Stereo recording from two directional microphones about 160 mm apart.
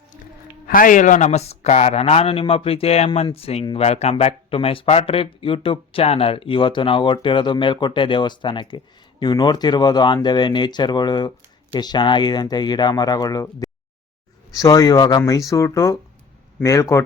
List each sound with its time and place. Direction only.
0.7 s speech: 60° left (ahead or behind); by 17.0 s 20° left (ahead or behind)